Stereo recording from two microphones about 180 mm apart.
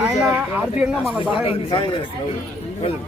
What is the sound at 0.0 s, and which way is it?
Speech, 5° right (ahead or behind).